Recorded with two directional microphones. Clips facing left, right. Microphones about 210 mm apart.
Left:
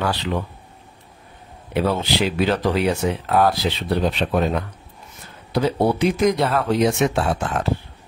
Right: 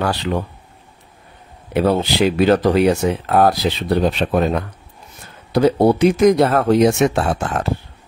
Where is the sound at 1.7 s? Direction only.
45° right (ahead or behind).